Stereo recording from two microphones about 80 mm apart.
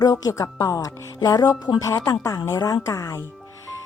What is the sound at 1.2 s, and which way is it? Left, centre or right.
Speech, left.